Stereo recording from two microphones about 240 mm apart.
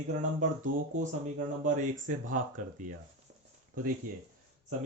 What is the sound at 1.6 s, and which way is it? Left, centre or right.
Speech, right.